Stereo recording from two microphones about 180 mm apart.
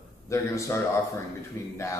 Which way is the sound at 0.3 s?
15° left (ahead or behind).